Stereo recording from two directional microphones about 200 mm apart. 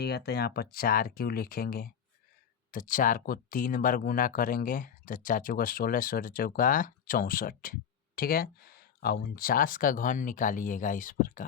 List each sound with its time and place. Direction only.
0.0 s speech: 55° left (ahead or behind)